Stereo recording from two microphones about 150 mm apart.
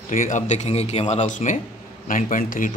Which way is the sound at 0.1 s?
60° left (ahead or behind).